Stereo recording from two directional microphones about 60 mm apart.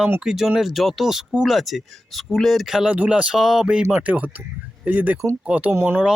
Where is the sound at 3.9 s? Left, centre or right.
Right.